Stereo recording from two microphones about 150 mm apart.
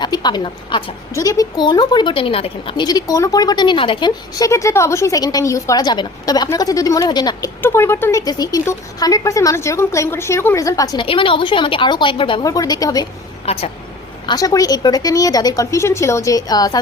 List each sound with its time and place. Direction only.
0.0 s speech: 30° left (ahead or behind)
1.1 s a woman's voice: 25° left (ahead or behind)
7.6 s a woman's voice: 15° left (ahead or behind)
11.0 s a woman's voice: 35° left (ahead or behind)
13.4 s a woman's voice: 40° left (ahead or behind)
14.3 s a woman's voice: 25° left (ahead or behind)